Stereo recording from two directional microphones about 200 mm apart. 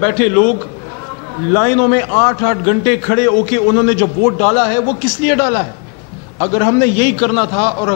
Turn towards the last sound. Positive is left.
turn(degrees=20)  # may be behind; listen again after turning